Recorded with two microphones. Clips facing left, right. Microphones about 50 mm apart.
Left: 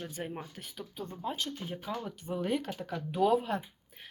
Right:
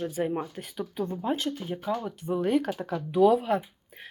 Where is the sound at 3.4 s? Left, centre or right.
Centre.